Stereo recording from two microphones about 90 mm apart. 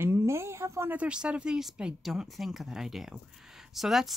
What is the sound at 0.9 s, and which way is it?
Speech, 15° right (ahead or behind).